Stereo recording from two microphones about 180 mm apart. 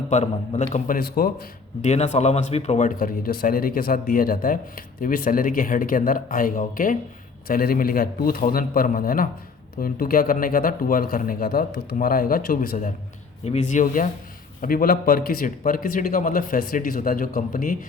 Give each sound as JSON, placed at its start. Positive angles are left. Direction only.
{"t": 0.1, "sound": "speech", "side_deg": 40}
{"t": 1.8, "sound": "speech", "side_deg": 35}
{"t": 13.4, "sound": "speech", "side_deg": 40}